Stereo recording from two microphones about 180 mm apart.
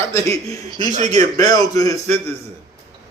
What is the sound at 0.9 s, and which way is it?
Speech, 40° right (ahead or behind).